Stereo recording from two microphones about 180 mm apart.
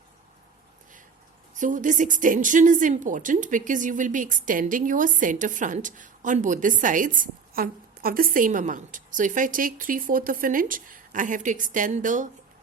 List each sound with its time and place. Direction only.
1.5 s speech: 45° right (ahead or behind)